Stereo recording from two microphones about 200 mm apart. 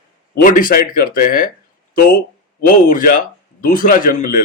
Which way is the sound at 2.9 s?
45° left (ahead or behind).